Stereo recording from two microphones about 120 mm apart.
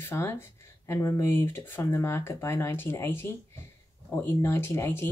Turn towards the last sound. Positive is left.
turn(degrees=20)  # may be behind; listen again after turning